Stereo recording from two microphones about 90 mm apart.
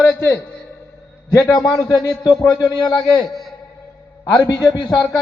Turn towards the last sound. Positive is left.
turn(degrees=50)  # may be behind; listen again after turning